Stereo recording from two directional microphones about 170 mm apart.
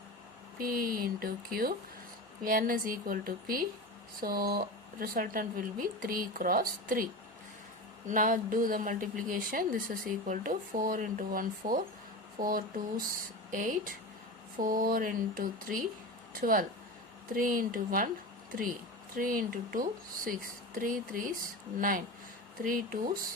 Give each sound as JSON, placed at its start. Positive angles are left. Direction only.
{"t": 0.6, "sound": "a woman's voice", "side_deg": -55}
{"t": 19.1, "sound": "a woman's voice", "side_deg": -55}